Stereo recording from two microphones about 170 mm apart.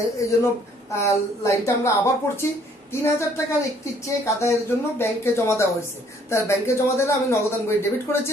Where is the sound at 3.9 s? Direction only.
15° left (ahead or behind).